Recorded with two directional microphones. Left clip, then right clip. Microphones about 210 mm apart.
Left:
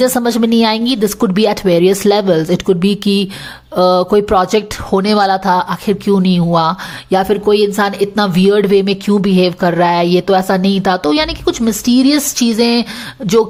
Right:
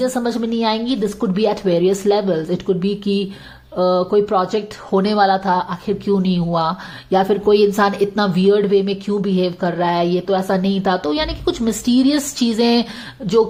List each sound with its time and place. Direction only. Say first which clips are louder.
0.0 s speech: left 7 dB; 25° left (ahead or behind)